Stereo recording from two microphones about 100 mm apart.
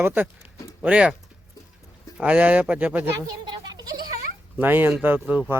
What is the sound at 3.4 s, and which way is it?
Goat, 45° right (ahead or behind).